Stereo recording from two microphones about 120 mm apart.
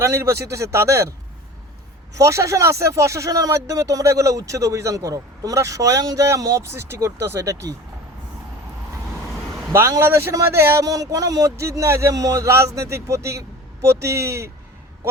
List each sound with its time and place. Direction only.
0.0 s speech: 25° right (ahead or behind)
2.1 s speech: 25° right (ahead or behind)
9.7 s speech: 20° right (ahead or behind)
15.0 s a sound: 20° right (ahead or behind)